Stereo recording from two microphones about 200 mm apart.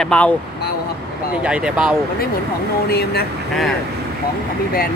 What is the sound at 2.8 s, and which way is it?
Speech, 50° left (ahead or behind).